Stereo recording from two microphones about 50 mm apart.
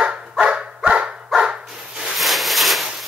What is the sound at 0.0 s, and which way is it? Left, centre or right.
Dog, centre.